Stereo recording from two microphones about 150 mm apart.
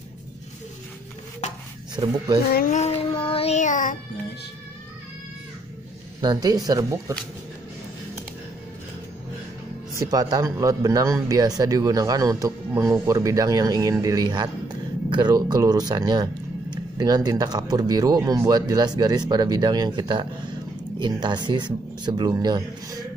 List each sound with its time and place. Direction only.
2.0 s speech: 25° right (ahead or behind)
2.7 s child singing: 45° left (ahead or behind); by 4.0 s 60° left (ahead or behind)
6.2 s speech: 25° right (ahead or behind)
9.9 s speech: 25° right (ahead or behind)